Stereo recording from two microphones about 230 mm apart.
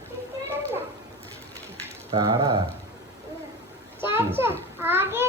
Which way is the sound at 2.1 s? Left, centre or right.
Centre.